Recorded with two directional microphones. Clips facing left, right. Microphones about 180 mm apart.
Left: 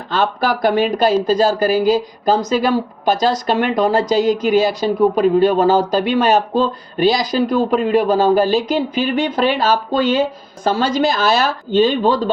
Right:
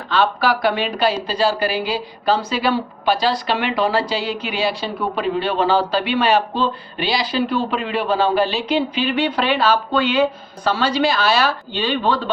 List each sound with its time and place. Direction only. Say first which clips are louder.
0.1 s speech: even; 45° left (ahead or behind)